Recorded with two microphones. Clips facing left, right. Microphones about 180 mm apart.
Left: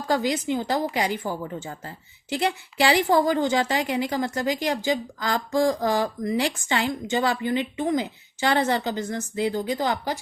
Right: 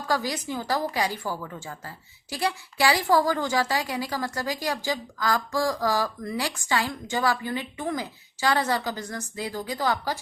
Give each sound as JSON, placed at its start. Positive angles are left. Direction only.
{"t": 0.1, "sound": "a woman's voice", "side_deg": 20}